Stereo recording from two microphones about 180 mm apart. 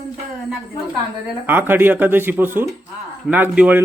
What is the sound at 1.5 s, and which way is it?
A man's voice, 10° right (ahead or behind).